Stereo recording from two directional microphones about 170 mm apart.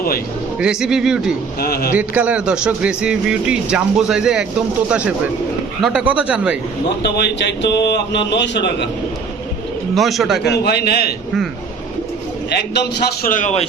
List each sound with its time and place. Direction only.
0.6 s speech: 5° right (ahead or behind)
1.5 s a man's voice: 65° left (ahead or behind)
1.9 s speech: 10° right (ahead or behind)
7.0 s speech: 85° left
9.9 s speech: centre (ahead or behind)
10.4 s a man's voice: 75° left (ahead or behind)
12.5 s a man's voice: 75° left (ahead or behind); by 13.7 s 45° left (ahead or behind)